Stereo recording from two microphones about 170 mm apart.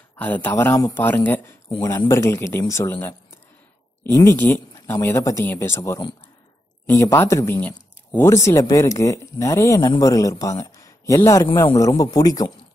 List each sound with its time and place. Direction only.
0.1 s speech: 10° left (ahead or behind)
1.7 s speech: 20° left (ahead or behind)